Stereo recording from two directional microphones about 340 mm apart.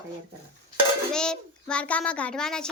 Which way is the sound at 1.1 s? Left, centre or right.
Centre.